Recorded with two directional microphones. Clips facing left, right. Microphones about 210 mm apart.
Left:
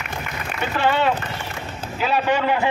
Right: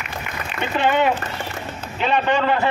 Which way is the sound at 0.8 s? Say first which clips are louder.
Right 2 dB; 15° right (ahead or behind).